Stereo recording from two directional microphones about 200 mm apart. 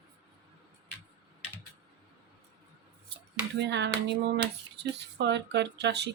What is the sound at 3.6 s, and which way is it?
Speech, 60° right (ahead or behind).